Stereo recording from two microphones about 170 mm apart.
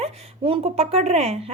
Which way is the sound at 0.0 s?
35° right (ahead or behind).